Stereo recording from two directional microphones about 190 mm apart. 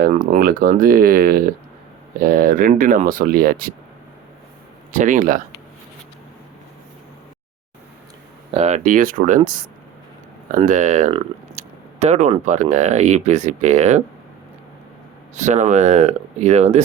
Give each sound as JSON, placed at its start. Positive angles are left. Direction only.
{"t": 0.0, "sound": "speech", "side_deg": -45}
{"t": 4.9, "sound": "speech", "side_deg": -40}
{"t": 8.5, "sound": "speech", "side_deg": -35}
{"t": 10.6, "sound": "speech", "side_deg": -40}
{"t": 15.4, "sound": "speech", "side_deg": -40}